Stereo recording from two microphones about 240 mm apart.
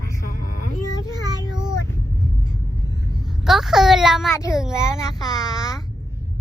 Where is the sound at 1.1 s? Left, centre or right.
Centre.